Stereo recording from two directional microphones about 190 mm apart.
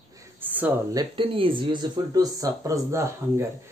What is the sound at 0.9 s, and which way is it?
Speech, 25° right (ahead or behind).